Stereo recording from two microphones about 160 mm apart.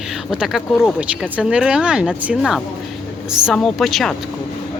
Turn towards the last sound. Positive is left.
turn(degrees=0)  # may be behind; listen again after turning